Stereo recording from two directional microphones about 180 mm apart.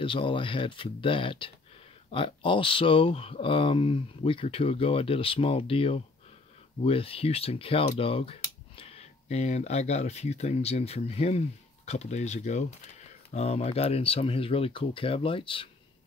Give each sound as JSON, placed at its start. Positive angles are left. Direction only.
{"t": 0.0, "sound": "speech", "side_deg": 30}